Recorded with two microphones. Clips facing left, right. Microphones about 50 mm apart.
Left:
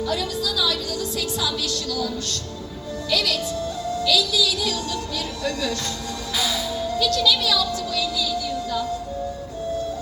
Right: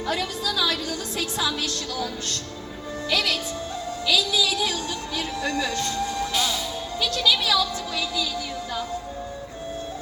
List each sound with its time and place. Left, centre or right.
0.1 s a woman's voice: right
7.0 s speech: right